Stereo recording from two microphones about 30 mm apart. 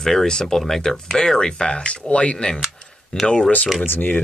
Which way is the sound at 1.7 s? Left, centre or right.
Left.